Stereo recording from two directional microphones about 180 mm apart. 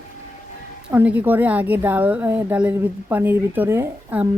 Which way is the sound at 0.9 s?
10° right (ahead or behind).